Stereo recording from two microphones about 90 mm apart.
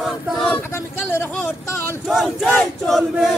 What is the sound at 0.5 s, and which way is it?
Speech, 25° left (ahead or behind).